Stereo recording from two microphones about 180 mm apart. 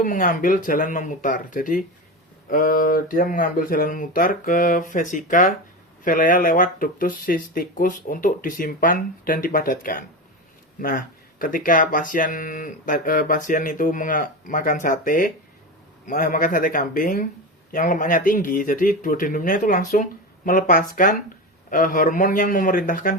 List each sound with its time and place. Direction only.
0.0 s speech: 50° left (ahead or behind)